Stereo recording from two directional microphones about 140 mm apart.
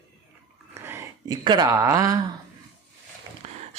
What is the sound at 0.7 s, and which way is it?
Dog, 20° right (ahead or behind).